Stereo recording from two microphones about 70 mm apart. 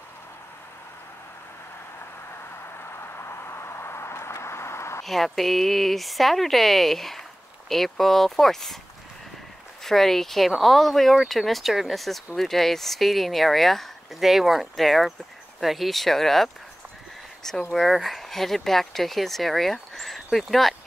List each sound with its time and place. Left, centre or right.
2.8 s vehicle: left
5.0 s speech: centre
9.8 s speech: centre